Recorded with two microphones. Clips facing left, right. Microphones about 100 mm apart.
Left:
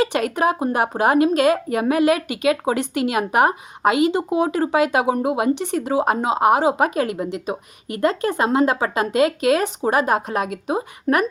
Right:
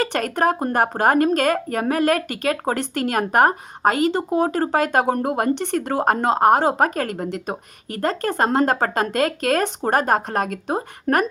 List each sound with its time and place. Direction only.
0.0 s speech: 55° right (ahead or behind)
4.1 s speech: 10° left (ahead or behind)
4.4 s speech: 45° right (ahead or behind)